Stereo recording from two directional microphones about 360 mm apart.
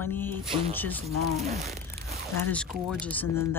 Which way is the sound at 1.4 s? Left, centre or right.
Centre.